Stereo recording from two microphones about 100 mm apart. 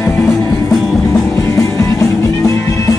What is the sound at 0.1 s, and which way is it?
Music, centre (ahead or behind).